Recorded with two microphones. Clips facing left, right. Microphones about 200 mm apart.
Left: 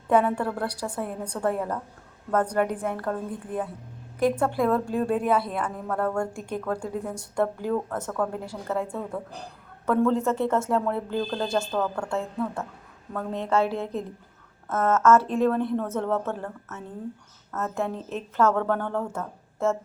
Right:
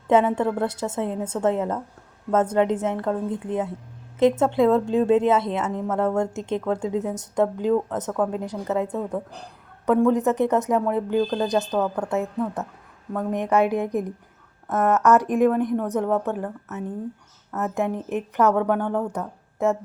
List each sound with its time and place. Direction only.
0.1 s a woman's voice: 20° right (ahead or behind)